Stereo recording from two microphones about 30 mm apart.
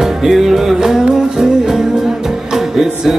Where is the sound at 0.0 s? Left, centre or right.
Centre.